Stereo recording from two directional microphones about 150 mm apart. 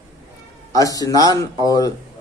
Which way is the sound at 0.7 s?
25° left (ahead or behind).